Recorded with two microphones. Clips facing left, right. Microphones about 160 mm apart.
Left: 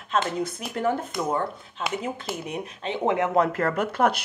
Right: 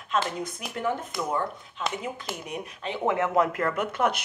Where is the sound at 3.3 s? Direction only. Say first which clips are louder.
Left 2 dB; 35° left (ahead or behind).